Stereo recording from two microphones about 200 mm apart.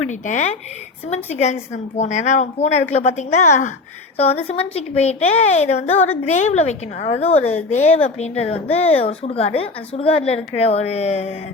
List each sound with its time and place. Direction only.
0.0 s a woman's voice: 35° left (ahead or behind)